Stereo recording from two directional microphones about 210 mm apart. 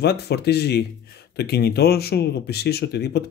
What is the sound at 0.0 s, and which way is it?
Speech, 50° left (ahead or behind).